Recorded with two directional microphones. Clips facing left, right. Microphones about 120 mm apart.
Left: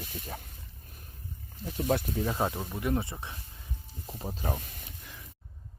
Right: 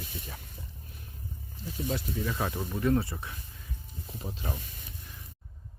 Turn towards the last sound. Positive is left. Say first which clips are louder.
# left 3 dB
turn(degrees=40)  # may be behind; listen again after turning